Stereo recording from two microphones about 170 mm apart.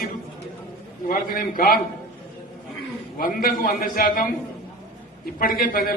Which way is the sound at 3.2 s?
55° left (ahead or behind).